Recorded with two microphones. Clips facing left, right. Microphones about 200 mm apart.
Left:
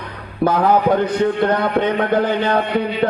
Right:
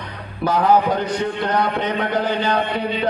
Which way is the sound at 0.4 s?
55° left (ahead or behind).